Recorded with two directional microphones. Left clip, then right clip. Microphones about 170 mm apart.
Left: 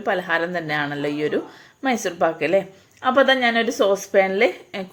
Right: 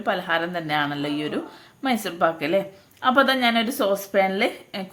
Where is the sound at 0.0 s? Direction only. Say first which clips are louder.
Left 2 dB; 15° left (ahead or behind).